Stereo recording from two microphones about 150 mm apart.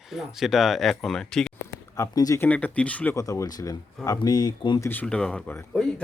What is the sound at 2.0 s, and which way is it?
Speech, 20° left (ahead or behind).